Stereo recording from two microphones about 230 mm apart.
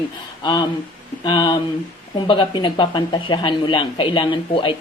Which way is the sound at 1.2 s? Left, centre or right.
Centre.